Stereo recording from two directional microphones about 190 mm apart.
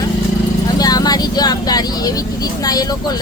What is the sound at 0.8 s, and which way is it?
Speech, 20° left (ahead or behind).